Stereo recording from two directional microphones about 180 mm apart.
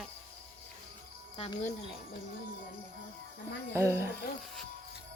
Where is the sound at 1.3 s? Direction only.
35° left (ahead or behind).